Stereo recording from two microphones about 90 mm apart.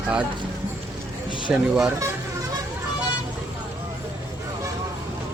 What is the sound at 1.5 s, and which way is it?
Speech, 10° right (ahead or behind).